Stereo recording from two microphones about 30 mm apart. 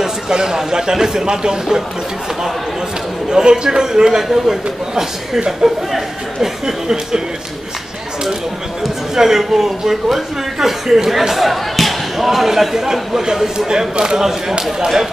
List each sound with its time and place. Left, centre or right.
0.0 s a man's voice: right
1.2 s a man's voice: right
3.3 s a man's voice: right; by 6.5 s centre
6.6 s a man's voice: centre
9.1 s a man's voice: centre